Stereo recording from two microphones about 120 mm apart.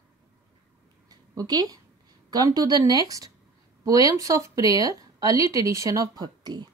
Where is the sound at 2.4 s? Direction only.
30° right (ahead or behind).